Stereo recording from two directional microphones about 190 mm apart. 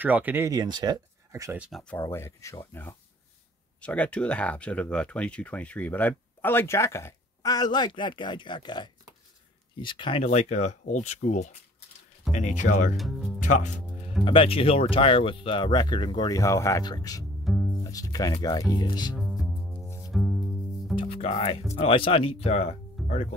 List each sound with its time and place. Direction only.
0.0 s speech: 10° right (ahead or behind)
1.7 s speech: 5° left (ahead or behind); by 10.2 s 25° left (ahead or behind)
10.2 s speech: 35° left (ahead or behind)
12.9 s speech: centre (ahead or behind)
13.4 s music: 40° left (ahead or behind)
14.2 s speech: 30° left (ahead or behind)
17.5 s music: centre (ahead or behind)
17.9 s speech: 20° left (ahead or behind)
19.1 s music: centre (ahead or behind)
20.9 s music: 30° left (ahead or behind)
21.7 s speech: 30° left (ahead or behind)
23.0 s music: centre (ahead or behind)